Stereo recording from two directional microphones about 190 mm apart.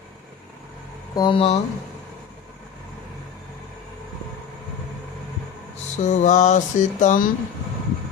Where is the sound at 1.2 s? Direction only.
25° left (ahead or behind).